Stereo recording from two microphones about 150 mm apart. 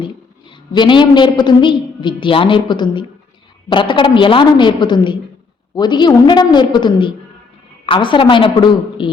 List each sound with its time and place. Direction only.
0.0 s a woman's voice: 35° left (ahead or behind)